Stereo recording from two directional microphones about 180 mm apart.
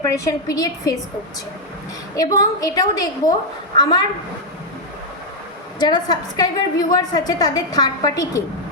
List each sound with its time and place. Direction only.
0.0 s a woman's voice: 20° left (ahead or behind)
2.1 s a woman's voice: 20° left (ahead or behind)
5.8 s a woman's voice: 25° left (ahead or behind)